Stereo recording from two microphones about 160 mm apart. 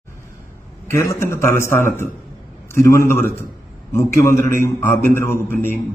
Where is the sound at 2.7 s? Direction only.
20° left (ahead or behind).